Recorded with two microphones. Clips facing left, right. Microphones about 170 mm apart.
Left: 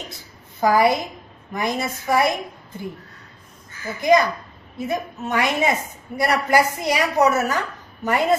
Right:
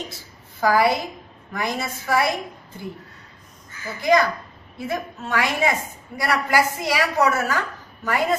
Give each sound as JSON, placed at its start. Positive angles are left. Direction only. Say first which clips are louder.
{"t": 0.1, "sound": "a sound", "louder": "left 1 dB", "side_deg": 20}
{"t": 1.5, "sound": "a woman's voice", "louder": "left 2 dB", "side_deg": 20}
{"t": 4.0, "sound": "a woman's voice", "louder": "left 2 dB", "side_deg": 20}